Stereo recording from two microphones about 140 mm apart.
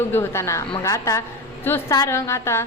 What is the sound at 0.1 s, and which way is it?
A woman's voice, 20° left (ahead or behind).